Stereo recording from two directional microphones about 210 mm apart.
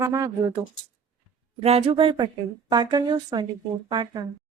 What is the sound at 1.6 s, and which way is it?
A woman's voice, 30° right (ahead or behind).